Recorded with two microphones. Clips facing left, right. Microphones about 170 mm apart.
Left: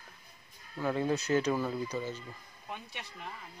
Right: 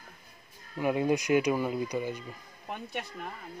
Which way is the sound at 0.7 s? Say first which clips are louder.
Right 4 dB; 15° right (ahead or behind).